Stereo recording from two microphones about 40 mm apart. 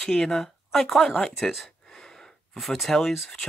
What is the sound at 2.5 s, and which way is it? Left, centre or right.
Speech, centre.